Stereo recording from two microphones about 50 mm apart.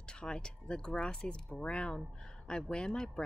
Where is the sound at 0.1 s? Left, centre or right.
Centre.